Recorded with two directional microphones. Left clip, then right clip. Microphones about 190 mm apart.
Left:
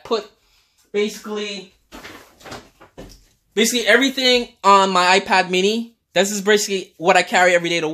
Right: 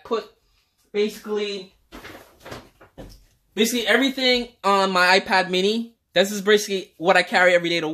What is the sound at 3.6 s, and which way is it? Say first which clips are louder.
Speech: left 4 dB; 30° left (ahead or behind).